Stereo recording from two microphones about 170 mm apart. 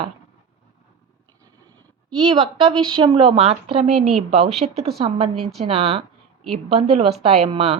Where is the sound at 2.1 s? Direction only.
30° right (ahead or behind).